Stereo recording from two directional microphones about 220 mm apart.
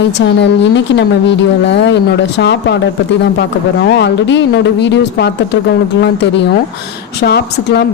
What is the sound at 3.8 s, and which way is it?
A woman's voice, 50° left (ahead or behind).